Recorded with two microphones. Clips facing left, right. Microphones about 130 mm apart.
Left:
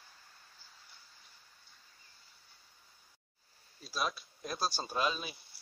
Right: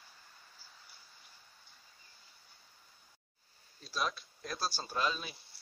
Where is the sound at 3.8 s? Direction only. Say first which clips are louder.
Even; 10° left (ahead or behind).